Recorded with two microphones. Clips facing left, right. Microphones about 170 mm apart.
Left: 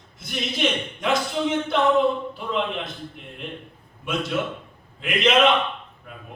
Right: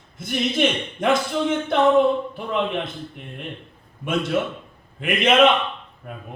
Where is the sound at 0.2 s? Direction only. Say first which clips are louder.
Right 5 dB; 55° right (ahead or behind).